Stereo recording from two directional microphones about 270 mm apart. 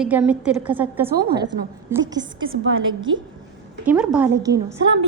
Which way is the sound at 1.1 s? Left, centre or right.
Right.